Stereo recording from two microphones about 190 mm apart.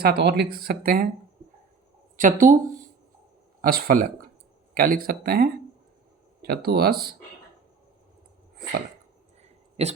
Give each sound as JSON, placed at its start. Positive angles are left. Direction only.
{"t": 0.0, "sound": "speech", "side_deg": -60}
{"t": 2.1, "sound": "speech", "side_deg": -45}
{"t": 9.4, "sound": "a sound", "side_deg": -35}